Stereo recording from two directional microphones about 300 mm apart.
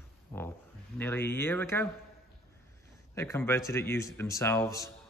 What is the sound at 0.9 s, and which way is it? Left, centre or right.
Speech, centre.